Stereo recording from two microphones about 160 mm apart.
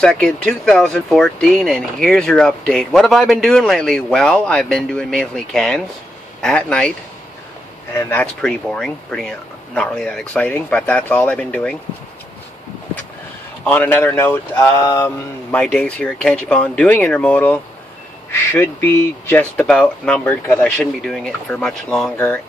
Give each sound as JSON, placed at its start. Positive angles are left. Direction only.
{"t": 0.0, "sound": "speech", "side_deg": 5}
{"t": 7.9, "sound": "speech", "side_deg": 15}
{"t": 13.7, "sound": "speech", "side_deg": 10}